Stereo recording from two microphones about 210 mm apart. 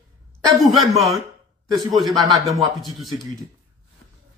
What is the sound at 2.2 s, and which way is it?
Speech, 15° right (ahead or behind).